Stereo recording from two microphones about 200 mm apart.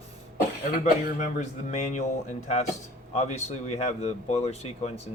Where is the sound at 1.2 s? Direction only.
35° left (ahead or behind).